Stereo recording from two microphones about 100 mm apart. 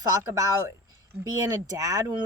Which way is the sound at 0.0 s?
35° right (ahead or behind).